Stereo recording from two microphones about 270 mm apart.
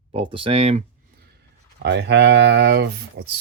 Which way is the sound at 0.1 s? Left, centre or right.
Centre.